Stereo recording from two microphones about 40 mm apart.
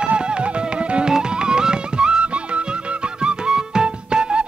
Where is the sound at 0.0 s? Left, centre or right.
Right.